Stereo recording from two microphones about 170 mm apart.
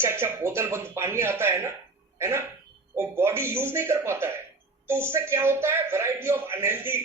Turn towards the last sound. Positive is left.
turn(degrees=-15)  # may be behind; listen again after turning